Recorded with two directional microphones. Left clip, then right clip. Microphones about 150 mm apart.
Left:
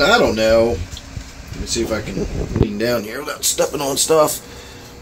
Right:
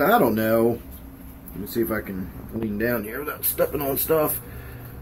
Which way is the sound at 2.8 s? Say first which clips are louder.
Left 2 dB; 35° left (ahead or behind).